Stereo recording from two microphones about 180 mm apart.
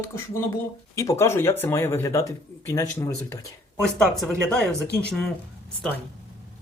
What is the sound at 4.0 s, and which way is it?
Speech, centre (ahead or behind).